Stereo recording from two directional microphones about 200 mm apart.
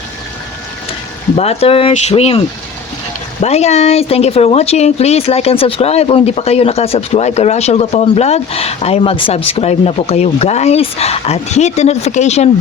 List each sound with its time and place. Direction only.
1.4 s speech: 30° left (ahead or behind)
3.4 s speech: 35° left (ahead or behind)